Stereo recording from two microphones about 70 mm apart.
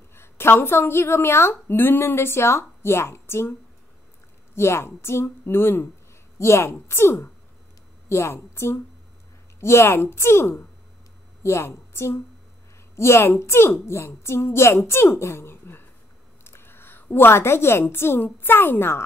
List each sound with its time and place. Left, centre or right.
0.1 s a woman's voice: left
4.6 s a woman's voice: left